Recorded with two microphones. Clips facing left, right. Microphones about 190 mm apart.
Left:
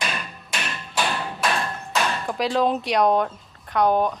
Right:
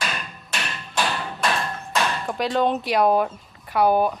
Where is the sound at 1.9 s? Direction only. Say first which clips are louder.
Even; centre (ahead or behind).